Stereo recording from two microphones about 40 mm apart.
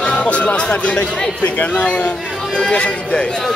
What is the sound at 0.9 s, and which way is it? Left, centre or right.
Speech, left.